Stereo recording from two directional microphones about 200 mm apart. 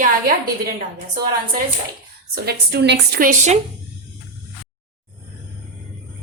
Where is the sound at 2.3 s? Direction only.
55° right (ahead or behind).